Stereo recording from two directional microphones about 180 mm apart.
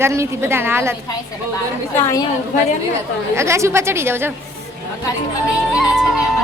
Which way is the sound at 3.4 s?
15° right (ahead or behind).